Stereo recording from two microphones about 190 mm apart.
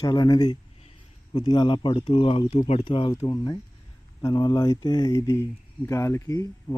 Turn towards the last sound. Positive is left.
turn(degrees=15)  # may be behind; listen again after turning